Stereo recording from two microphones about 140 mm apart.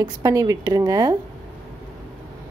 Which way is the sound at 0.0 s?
25° right (ahead or behind).